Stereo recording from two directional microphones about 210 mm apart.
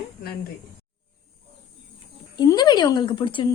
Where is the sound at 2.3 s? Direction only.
20° left (ahead or behind).